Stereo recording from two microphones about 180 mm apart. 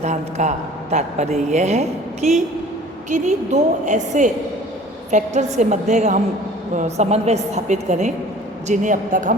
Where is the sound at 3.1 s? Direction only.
40° right (ahead or behind).